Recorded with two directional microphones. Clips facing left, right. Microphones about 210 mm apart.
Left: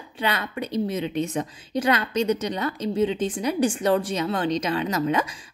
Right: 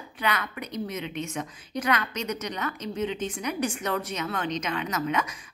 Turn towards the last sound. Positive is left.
turn(degrees=35)  # may be behind; listen again after turning